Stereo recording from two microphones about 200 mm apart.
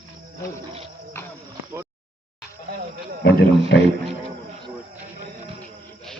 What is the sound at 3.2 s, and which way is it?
Wild animals, 60° left (ahead or behind).